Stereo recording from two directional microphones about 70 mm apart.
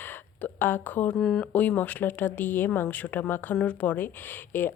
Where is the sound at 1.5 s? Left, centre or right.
Left.